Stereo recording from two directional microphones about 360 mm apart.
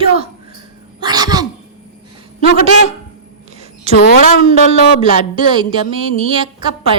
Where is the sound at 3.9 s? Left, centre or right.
Left.